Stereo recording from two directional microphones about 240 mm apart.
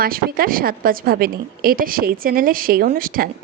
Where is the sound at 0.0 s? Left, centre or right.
Right.